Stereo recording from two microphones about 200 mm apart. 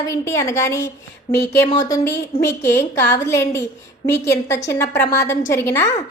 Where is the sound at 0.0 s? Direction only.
15° left (ahead or behind).